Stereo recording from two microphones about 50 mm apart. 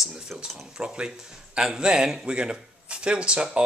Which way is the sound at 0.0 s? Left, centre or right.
Centre.